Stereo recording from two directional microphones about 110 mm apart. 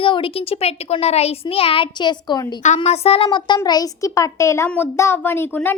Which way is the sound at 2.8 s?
70° left (ahead or behind).